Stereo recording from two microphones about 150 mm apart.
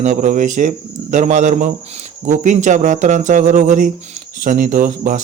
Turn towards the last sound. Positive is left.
turn(degrees=-65)  # may be behind; listen again after turning